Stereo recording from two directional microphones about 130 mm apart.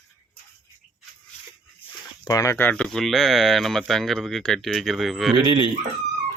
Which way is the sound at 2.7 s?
5° left (ahead or behind).